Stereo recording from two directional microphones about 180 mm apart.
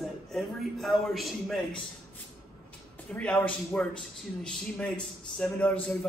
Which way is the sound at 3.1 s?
10° left (ahead or behind).